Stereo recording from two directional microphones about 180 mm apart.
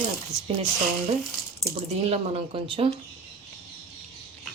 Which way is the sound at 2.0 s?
35° right (ahead or behind).